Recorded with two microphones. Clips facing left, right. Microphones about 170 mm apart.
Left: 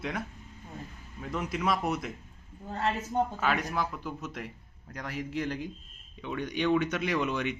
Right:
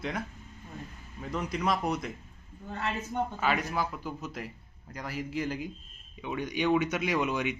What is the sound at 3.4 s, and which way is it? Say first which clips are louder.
Speech: even; centre (ahead or behind).